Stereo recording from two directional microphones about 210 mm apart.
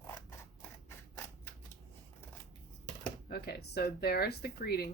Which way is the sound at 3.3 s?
50° left (ahead or behind).